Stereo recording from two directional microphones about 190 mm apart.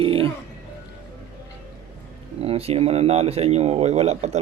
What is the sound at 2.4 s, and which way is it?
Speech, 30° right (ahead or behind).